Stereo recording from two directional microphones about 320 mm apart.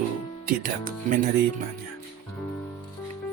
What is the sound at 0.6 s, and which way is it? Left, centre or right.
Speech, right.